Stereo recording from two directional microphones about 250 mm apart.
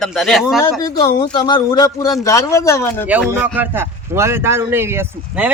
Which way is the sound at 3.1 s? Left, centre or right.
Centre.